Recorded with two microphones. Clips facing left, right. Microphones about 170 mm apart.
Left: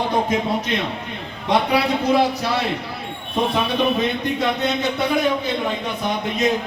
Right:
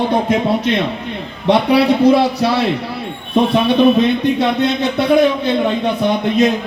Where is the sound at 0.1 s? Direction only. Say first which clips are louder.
Right 5 dB; 65° right (ahead or behind).